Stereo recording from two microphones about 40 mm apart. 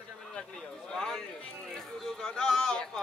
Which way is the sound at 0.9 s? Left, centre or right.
Centre.